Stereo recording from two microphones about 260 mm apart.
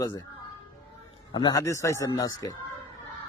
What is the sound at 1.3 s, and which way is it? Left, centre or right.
A man's voice, centre.